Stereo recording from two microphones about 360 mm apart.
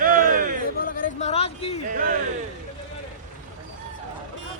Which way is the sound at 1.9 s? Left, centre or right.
Right.